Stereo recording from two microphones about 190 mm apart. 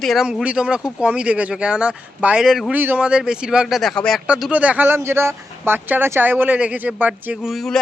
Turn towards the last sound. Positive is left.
turn(degrees=0)  # may be behind; listen again after turning